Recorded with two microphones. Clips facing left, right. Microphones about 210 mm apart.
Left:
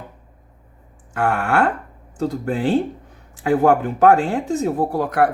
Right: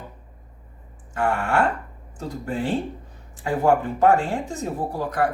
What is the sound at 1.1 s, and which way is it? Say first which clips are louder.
A woman's voice: left 3 dB; 65° left (ahead or behind).